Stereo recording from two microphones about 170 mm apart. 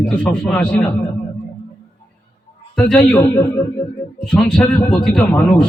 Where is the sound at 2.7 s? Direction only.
5° left (ahead or behind).